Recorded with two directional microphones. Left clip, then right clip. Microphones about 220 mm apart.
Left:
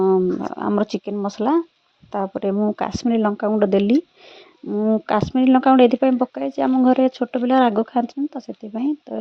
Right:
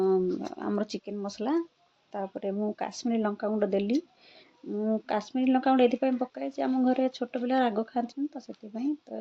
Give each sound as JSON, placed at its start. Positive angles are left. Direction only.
{"t": 0.0, "sound": "speech", "side_deg": 40}